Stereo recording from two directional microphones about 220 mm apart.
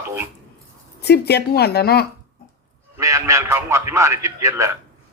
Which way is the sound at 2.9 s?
15° right (ahead or behind).